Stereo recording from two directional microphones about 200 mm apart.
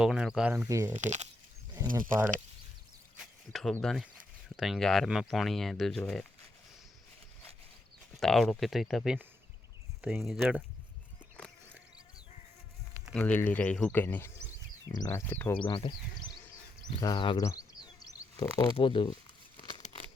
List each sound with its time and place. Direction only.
0.0 s speech: centre (ahead or behind)
0.9 s speech: 35° right (ahead or behind)
1.8 s a sound: 15° right (ahead or behind)
3.5 s speech: centre (ahead or behind)
8.2 s speech: centre (ahead or behind)
11.4 s a sound: 10° left (ahead or behind)
13.1 s speech: 5° left (ahead or behind)
15.5 s speech: 25° left (ahead or behind)
19.7 s a sound: 30° left (ahead or behind)